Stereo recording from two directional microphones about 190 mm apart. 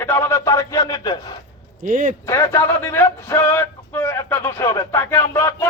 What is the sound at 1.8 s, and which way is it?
Speech, 45° right (ahead or behind).